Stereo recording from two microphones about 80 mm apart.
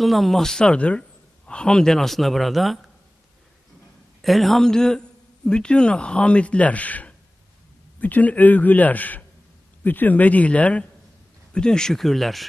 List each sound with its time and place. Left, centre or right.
0.0 s a man's voice: centre
4.2 s a man's voice: centre